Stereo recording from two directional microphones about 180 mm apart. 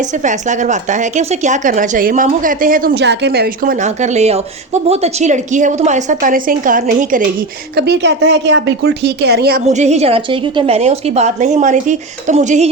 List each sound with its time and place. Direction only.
0.3 s a woman's voice: 45° right (ahead or behind)
3.8 s a woman's voice: 40° right (ahead or behind)
7.8 s speech: 70° right (ahead or behind)
9.7 s a woman's voice: 40° right (ahead or behind)